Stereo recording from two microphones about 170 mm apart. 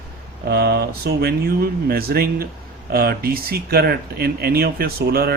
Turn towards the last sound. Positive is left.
turn(degrees=-65)  # may be behind; listen again after turning